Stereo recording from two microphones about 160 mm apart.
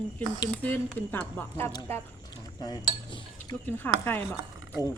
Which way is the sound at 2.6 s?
25° left (ahead or behind).